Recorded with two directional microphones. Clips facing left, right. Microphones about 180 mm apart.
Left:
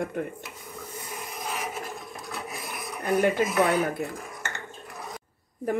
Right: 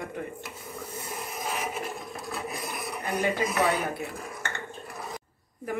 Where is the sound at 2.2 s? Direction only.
Centre (ahead or behind).